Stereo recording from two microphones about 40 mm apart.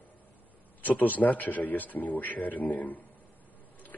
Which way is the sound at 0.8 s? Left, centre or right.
Left.